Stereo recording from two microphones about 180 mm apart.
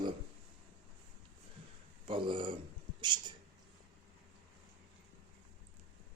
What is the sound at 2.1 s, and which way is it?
Speech, 30° right (ahead or behind).